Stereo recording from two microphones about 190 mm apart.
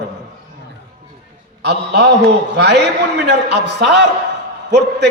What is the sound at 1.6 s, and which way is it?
A man's voice, 65° right (ahead or behind).